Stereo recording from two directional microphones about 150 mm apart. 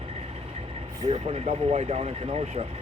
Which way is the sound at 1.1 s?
45° right (ahead or behind).